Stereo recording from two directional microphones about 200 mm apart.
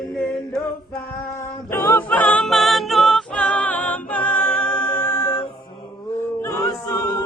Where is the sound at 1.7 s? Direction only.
10° left (ahead or behind).